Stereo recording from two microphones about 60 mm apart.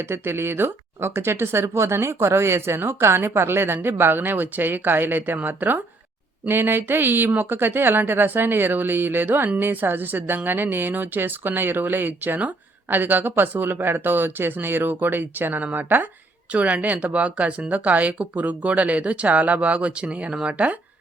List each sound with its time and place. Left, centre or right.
0.0 s speech: right
16.5 s speech: right